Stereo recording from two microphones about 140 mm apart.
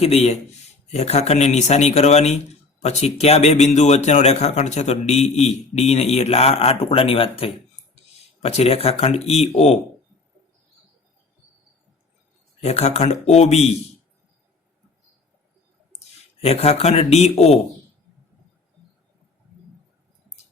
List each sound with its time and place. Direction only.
0.0 s speech: 45° left (ahead or behind)
12.6 s speech: 50° left (ahead or behind)
16.4 s speech: 45° left (ahead or behind)